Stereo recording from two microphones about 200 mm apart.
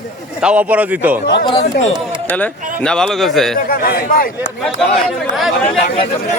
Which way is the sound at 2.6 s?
40° right (ahead or behind).